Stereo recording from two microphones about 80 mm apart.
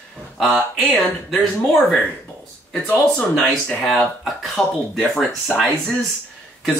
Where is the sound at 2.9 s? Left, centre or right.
Centre.